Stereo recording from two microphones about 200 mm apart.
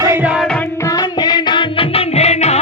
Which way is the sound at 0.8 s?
20° left (ahead or behind).